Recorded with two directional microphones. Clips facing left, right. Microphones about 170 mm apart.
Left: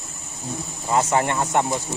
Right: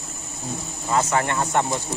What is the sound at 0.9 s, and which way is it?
Speech, 20° left (ahead or behind).